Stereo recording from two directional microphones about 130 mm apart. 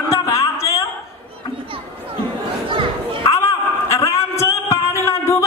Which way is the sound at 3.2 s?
25° left (ahead or behind).